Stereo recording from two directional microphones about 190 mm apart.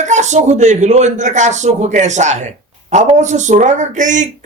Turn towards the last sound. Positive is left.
turn(degrees=-40)  # may be behind; listen again after turning